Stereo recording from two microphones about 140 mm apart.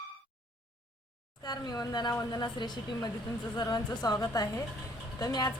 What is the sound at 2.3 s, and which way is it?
A woman's voice, 30° left (ahead or behind).